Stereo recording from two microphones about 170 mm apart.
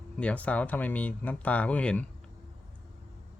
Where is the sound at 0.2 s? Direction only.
10° left (ahead or behind).